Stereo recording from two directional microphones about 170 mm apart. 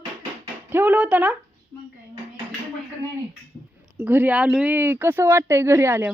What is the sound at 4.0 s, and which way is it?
Speech, 10° right (ahead or behind).